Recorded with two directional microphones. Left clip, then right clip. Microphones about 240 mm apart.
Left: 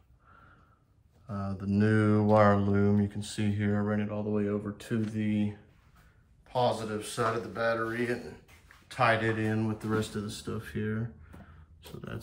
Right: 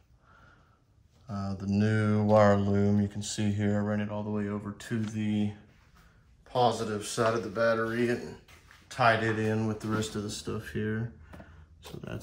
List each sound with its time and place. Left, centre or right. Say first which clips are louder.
1.2 s speech: even; centre
6.5 s speech: right 2 dB; centre